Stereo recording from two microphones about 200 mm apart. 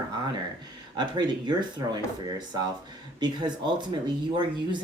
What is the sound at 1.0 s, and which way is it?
Speech, 20° right (ahead or behind).